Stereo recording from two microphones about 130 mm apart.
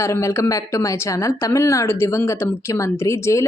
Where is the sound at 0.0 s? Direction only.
20° left (ahead or behind).